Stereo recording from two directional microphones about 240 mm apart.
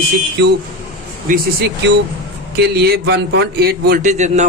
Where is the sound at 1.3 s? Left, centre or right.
Right.